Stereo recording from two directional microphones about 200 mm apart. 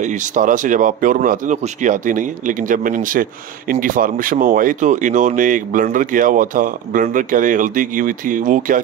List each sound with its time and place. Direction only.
0.0 s speech: 40° right (ahead or behind)